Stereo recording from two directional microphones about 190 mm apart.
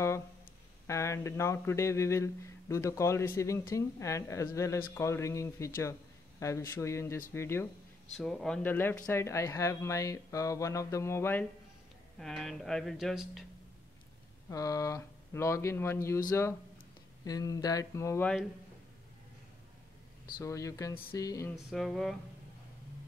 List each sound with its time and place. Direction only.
0.8 s speech: 15° left (ahead or behind)
8.2 s speech: 5° left (ahead or behind)
12.2 s speech: centre (ahead or behind)
14.5 s speech: 15° left (ahead or behind)
20.3 s speech: 15° left (ahead or behind)
21.6 s speech: centre (ahead or behind)